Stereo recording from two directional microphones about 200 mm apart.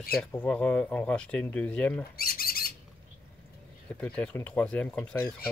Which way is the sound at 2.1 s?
50° left (ahead or behind).